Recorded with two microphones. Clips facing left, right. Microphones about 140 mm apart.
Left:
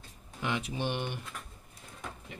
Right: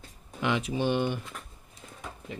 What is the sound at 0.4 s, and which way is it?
Speech, 90° right.